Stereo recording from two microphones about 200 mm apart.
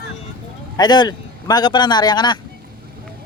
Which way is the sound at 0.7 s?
20° left (ahead or behind).